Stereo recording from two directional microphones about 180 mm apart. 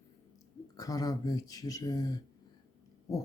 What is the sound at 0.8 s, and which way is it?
Speech, 20° left (ahead or behind).